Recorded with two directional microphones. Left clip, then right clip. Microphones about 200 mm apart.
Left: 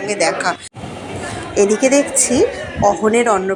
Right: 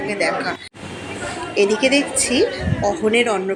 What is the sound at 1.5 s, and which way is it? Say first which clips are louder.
Speech: left 3 dB; 35° left (ahead or behind).